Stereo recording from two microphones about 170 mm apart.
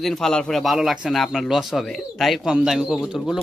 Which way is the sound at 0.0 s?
Centre (ahead or behind).